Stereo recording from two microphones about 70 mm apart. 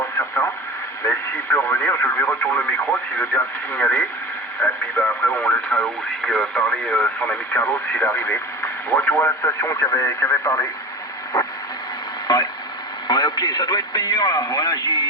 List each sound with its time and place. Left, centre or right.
0.2 s speech: left
11.3 s a sound: left
13.1 s speech: left